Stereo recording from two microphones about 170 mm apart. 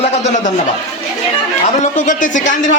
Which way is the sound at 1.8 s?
50° left (ahead or behind).